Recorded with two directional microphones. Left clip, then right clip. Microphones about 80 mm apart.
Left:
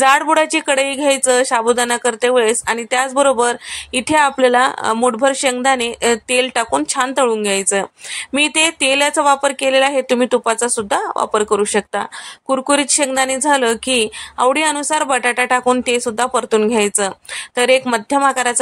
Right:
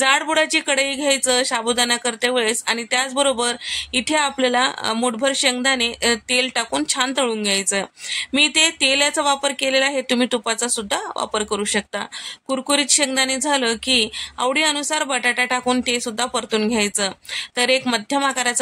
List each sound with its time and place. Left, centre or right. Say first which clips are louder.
0.0 s speech: left 5 dB; left
10.0 s speech: left 5 dB; centre